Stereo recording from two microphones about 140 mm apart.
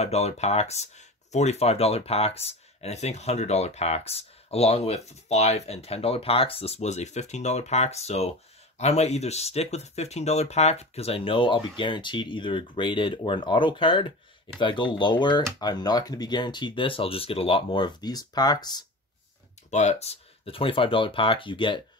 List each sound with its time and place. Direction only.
0.0 s speech: 50° left (ahead or behind); by 18.9 s 30° left (ahead or behind)
19.7 s speech: 55° left (ahead or behind); by 21.8 s 35° left (ahead or behind)